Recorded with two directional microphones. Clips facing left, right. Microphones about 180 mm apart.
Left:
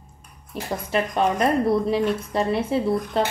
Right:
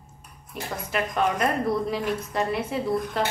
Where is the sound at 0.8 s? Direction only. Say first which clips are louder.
Left 3 dB; 30° left (ahead or behind).